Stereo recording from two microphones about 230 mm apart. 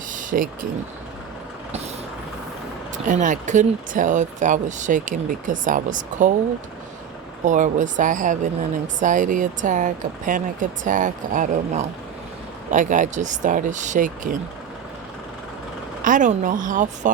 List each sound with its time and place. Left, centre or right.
0.1 s vehicle: right
3.1 s speech: right
7.4 s speech: right
16.0 s speech: right